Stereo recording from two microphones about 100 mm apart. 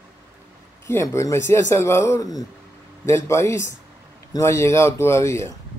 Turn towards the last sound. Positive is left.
turn(degrees=30)  # may be behind; listen again after turning